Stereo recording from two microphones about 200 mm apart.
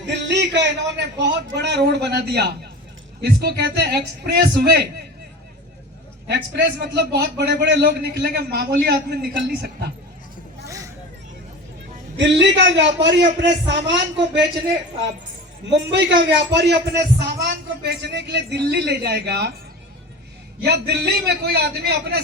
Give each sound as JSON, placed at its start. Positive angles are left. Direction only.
{"t": 0.0, "sound": "a man's voice", "side_deg": -60}
{"t": 6.2, "sound": "a man's voice", "side_deg": -55}
{"t": 10.7, "sound": "vehicle", "side_deg": -15}
{"t": 12.1, "sound": "a man's voice", "side_deg": -65}
{"t": 15.6, "sound": "a man's voice", "side_deg": -60}
{"t": 20.7, "sound": "a man's voice", "side_deg": -55}